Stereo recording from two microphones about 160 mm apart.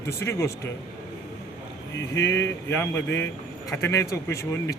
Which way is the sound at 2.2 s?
15° left (ahead or behind).